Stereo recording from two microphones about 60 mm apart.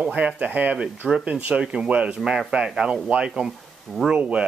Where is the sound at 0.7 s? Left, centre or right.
Centre.